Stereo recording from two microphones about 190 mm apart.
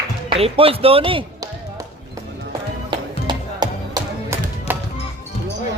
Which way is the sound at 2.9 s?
25° right (ahead or behind).